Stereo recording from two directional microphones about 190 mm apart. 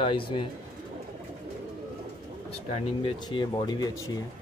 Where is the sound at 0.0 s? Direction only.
25° left (ahead or behind).